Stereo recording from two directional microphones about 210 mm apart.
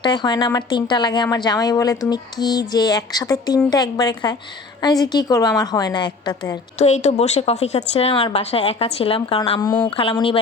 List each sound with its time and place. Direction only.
0.0 s speech: 20° left (ahead or behind)
6.7 s speech: 30° left (ahead or behind)